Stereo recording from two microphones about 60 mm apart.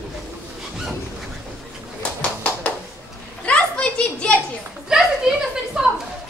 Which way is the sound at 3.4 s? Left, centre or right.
Left.